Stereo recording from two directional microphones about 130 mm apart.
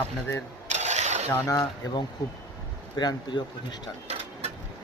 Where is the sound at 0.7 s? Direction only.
60° right (ahead or behind).